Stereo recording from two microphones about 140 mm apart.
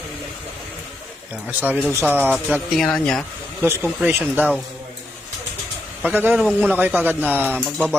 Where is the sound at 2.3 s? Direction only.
5° right (ahead or behind).